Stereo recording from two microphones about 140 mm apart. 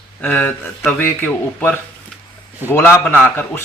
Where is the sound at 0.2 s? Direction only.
15° left (ahead or behind).